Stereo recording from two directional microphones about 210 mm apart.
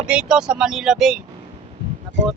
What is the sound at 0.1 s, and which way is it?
Speech, 5° right (ahead or behind).